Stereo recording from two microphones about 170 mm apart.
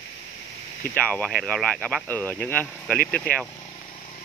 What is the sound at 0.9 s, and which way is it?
Speech, 10° left (ahead or behind).